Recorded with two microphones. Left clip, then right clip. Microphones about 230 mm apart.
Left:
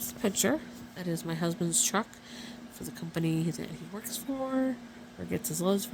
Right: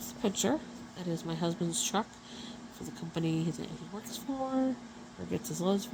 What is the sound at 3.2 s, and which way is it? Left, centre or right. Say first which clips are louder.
Speech: left 2 dB; left.